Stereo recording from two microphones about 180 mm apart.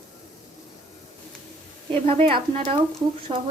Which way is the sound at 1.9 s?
30° right (ahead or behind).